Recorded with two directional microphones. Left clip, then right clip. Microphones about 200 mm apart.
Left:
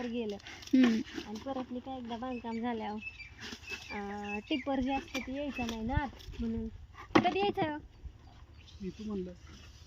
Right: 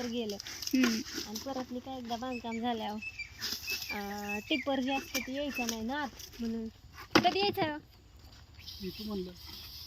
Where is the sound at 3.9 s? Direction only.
20° right (ahead or behind); by 6.1 s centre (ahead or behind).